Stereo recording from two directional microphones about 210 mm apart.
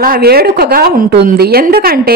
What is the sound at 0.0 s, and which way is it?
A woman's voice, 45° right (ahead or behind).